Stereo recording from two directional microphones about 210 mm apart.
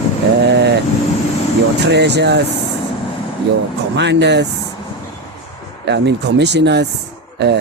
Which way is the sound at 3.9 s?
55° right (ahead or behind).